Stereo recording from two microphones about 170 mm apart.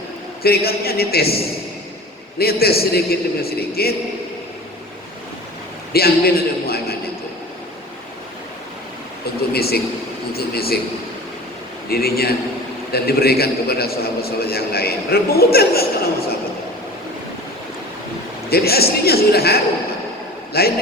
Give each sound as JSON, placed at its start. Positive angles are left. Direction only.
{"t": 0.4, "sound": "a man's voice", "side_deg": 65}
{"t": 2.4, "sound": "a man's voice", "side_deg": 65}
{"t": 5.9, "sound": "a man's voice", "side_deg": 65}
{"t": 9.5, "sound": "a man's voice", "side_deg": 65}
{"t": 11.9, "sound": "a man's voice", "side_deg": 65}
{"t": 18.5, "sound": "a man's voice", "side_deg": 65}